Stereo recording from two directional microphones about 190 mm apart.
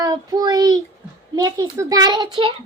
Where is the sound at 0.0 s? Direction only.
20° right (ahead or behind).